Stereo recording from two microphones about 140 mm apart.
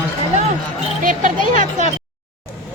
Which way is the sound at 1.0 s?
65° right (ahead or behind).